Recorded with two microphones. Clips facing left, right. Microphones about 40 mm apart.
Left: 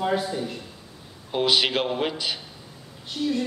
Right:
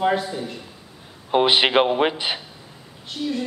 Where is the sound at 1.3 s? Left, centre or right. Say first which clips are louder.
Right 6 dB; right.